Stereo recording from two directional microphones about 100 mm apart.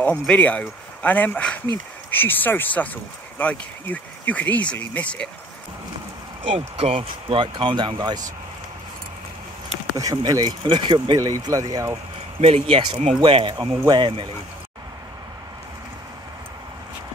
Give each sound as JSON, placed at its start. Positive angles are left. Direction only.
{"t": 0.0, "sound": "speech", "side_deg": 15}
{"t": 6.8, "sound": "speech", "side_deg": -80}
{"t": 9.9, "sound": "speech", "side_deg": -35}
{"t": 10.6, "sound": "speech", "side_deg": -55}
{"t": 11.1, "sound": "speech", "side_deg": -35}
{"t": 12.4, "sound": "speech", "side_deg": -85}